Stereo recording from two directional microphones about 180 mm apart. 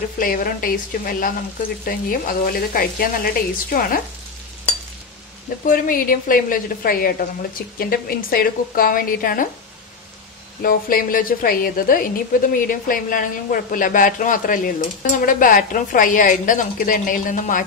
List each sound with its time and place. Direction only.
0.2 s a woman's voice: 50° left (ahead or behind)
5.7 s a woman's voice: 50° left (ahead or behind)
10.6 s a woman's voice: 50° left (ahead or behind)